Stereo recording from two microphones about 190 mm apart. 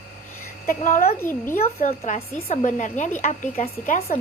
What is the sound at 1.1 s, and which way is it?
Speech, 10° left (ahead or behind).